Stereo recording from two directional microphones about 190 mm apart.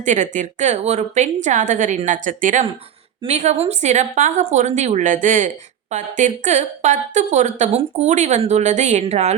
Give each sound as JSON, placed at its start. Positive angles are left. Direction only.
{"t": 0.0, "sound": "a woman's voice", "side_deg": -40}